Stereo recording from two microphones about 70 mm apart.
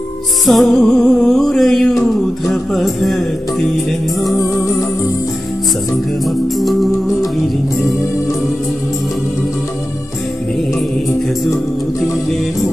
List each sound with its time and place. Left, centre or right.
0.5 s music: centre
4.4 s music: left
6.2 s music: centre